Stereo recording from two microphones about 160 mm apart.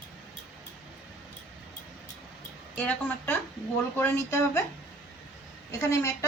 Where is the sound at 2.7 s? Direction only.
10° left (ahead or behind).